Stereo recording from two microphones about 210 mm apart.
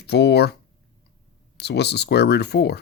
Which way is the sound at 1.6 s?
50° left (ahead or behind).